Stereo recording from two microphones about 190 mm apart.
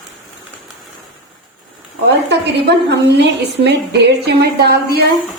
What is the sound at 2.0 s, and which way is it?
A woman's voice, 60° right (ahead or behind).